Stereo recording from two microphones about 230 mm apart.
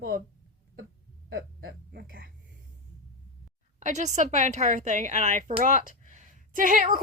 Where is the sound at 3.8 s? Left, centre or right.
Right.